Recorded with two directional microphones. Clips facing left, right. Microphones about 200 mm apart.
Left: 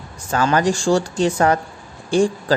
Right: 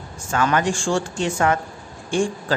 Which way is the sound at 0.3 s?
35° left (ahead or behind).